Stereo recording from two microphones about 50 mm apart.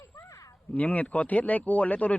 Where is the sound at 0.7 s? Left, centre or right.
Left.